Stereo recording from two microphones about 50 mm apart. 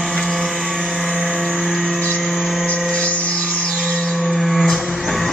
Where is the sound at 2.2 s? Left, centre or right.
Centre.